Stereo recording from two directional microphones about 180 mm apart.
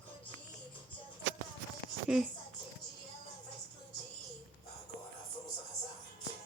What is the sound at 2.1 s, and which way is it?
Speech, 5° right (ahead or behind).